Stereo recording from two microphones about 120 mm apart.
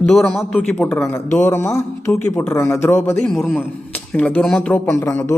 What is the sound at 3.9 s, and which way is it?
Speech, 10° left (ahead or behind).